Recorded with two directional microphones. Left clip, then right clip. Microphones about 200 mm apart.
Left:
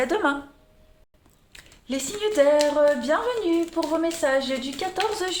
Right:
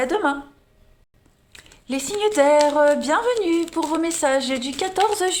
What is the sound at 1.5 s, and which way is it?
Speech, 25° right (ahead or behind).